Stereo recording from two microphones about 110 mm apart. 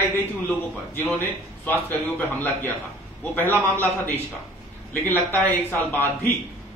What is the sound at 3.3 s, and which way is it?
Speech, 20° left (ahead or behind).